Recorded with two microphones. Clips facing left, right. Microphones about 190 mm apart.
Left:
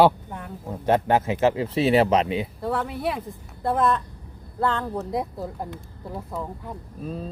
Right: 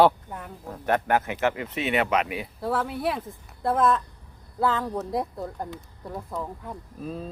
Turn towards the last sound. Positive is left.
turn(degrees=0)  # may be behind; listen again after turning